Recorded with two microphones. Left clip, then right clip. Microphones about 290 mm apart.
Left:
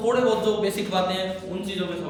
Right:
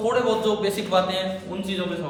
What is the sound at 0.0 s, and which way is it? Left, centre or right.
A man's voice, centre.